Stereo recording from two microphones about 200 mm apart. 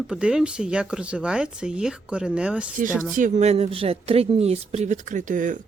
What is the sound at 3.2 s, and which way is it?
Speech, 40° right (ahead or behind).